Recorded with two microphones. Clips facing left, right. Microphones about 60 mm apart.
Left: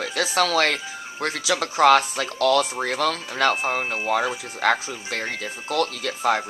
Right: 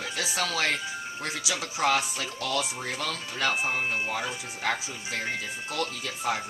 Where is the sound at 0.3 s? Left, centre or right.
Left.